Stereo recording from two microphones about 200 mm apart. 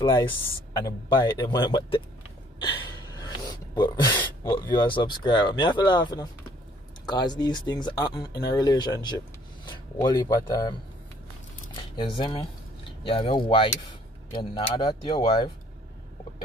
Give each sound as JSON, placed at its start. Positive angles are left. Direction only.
{"t": 0.0, "sound": "speech", "side_deg": 20}
{"t": 2.7, "sound": "gasp", "side_deg": 20}
{"t": 4.2, "sound": "speech", "side_deg": 20}